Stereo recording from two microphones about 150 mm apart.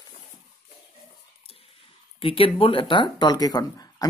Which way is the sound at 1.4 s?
40° left (ahead or behind).